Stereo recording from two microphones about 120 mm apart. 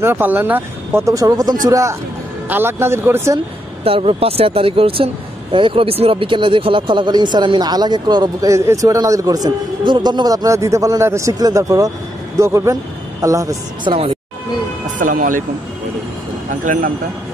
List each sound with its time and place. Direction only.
0.0 s speech: 15° right (ahead or behind)
3.8 s speech: 50° right (ahead or behind); by 13.6 s 25° right (ahead or behind)
13.8 s speech: 55° right (ahead or behind)
15.0 s speech: 90° right